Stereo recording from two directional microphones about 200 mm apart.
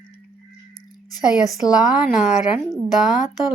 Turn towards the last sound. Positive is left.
turn(degrees=0)  # may be behind; listen again after turning